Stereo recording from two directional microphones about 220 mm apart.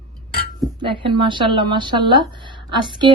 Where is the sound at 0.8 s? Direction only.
20° right (ahead or behind).